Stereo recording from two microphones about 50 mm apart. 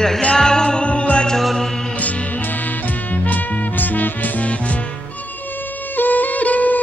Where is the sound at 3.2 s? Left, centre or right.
Left.